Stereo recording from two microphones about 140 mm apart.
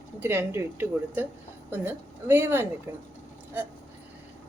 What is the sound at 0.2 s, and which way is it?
A woman's voice, 15° right (ahead or behind).